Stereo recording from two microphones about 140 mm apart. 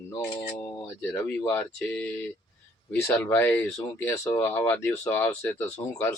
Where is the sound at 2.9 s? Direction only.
15° left (ahead or behind).